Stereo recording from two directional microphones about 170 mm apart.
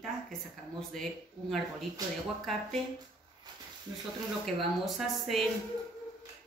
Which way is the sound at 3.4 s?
25° right (ahead or behind).